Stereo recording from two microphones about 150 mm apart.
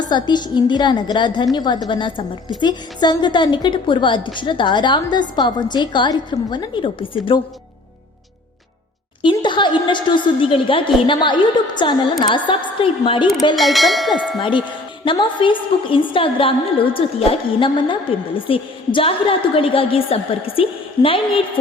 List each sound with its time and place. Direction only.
0.1 s a woman's voice: 30° left (ahead or behind)
9.2 s a woman's voice: 30° left (ahead or behind)
13.6 s bell: centre (ahead or behind)
15.0 s a woman's voice: 30° left (ahead or behind)